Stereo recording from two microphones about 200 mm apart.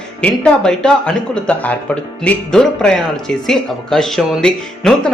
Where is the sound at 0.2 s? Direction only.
5° left (ahead or behind).